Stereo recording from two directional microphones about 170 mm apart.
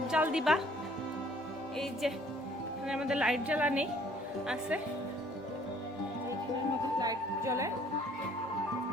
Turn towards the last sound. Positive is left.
turn(degrees=-15)  # may be behind; listen again after turning